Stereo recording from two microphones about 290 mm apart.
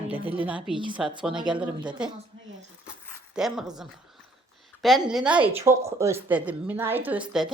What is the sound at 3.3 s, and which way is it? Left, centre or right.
Speech, centre.